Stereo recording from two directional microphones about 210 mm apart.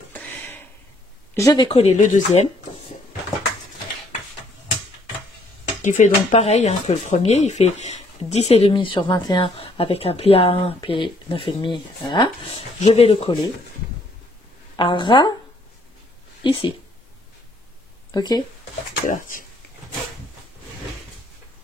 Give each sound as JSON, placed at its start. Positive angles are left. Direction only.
{"t": 0.1, "sound": "a sound", "side_deg": 10}
{"t": 1.3, "sound": "speech", "side_deg": 15}
{"t": 1.7, "sound": "speech", "side_deg": 35}
{"t": 5.8, "sound": "speech", "side_deg": 35}
{"t": 14.8, "sound": "speech", "side_deg": 20}
{"t": 16.4, "sound": "speech", "side_deg": 25}
{"t": 18.1, "sound": "speech", "side_deg": 20}
{"t": 19.0, "sound": "speech", "side_deg": 40}